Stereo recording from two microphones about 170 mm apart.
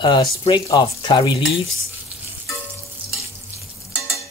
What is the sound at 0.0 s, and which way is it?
Stir, 30° left (ahead or behind).